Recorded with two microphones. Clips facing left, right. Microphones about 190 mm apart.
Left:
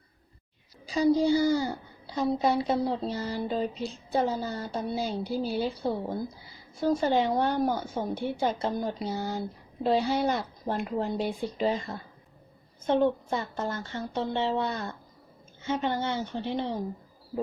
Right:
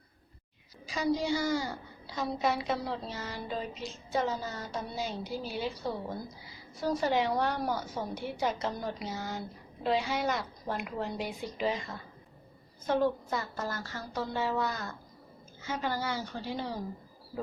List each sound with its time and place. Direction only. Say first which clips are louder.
0.9 s a woman's voice: left 7 dB; 30° left (ahead or behind)